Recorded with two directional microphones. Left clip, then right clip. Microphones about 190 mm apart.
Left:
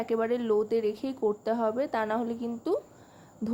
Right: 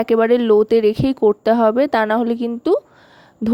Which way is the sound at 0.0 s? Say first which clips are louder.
Right 14 dB; 45° right (ahead or behind).